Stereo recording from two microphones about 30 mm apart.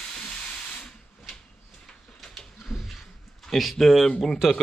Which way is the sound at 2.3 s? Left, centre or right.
Centre.